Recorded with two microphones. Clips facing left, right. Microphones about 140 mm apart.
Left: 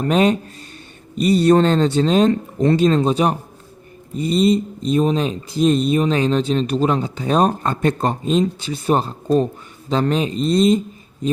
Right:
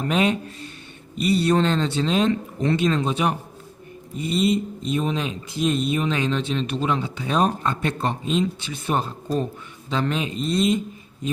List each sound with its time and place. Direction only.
0.0 s speech: 40° left (ahead or behind)